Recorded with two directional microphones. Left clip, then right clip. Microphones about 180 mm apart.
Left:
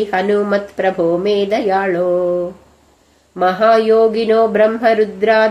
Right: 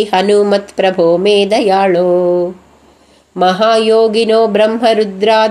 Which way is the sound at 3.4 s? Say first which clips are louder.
Right 2 dB; 25° right (ahead or behind).